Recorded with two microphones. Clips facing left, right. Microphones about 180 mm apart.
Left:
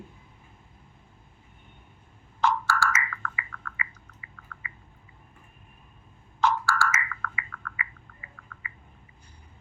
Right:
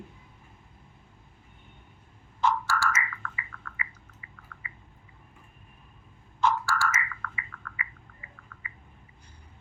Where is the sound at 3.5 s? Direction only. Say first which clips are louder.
Left 2 dB; 90° left.